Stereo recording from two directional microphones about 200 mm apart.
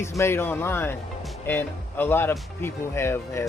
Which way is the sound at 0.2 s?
10° left (ahead or behind).